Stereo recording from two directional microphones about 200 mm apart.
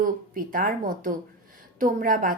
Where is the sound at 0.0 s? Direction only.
45° right (ahead or behind).